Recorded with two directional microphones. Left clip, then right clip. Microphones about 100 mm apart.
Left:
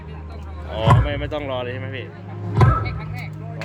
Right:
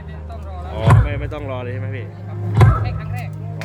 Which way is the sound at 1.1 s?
15° right (ahead or behind).